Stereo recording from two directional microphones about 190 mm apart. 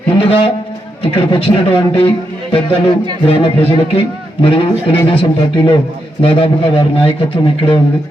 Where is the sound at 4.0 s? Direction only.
30° left (ahead or behind).